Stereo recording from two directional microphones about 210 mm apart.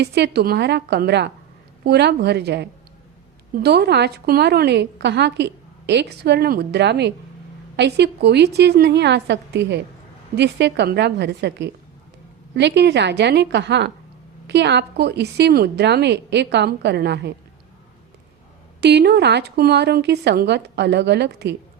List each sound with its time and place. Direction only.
0.0 s a woman's voice: 50° right (ahead or behind)
18.8 s a woman's voice: 50° right (ahead or behind)